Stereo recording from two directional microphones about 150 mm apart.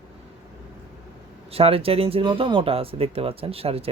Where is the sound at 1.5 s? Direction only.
40° right (ahead or behind).